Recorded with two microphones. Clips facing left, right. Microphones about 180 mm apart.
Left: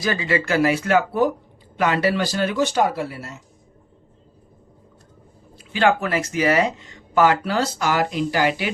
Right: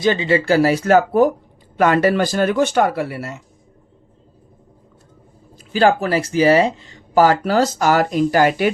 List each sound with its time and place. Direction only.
0.0 s speech: 25° right (ahead or behind); by 2.8 s 55° right (ahead or behind)
2.9 s speech: 65° right (ahead or behind)
5.5 s speech: 35° right (ahead or behind)